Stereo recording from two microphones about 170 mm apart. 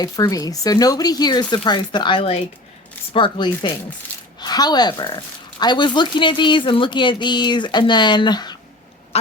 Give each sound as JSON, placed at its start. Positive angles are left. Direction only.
{"t": 0.0, "sound": "speech", "side_deg": 20}